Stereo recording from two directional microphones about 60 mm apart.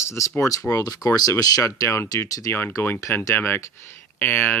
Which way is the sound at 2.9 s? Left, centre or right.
Left.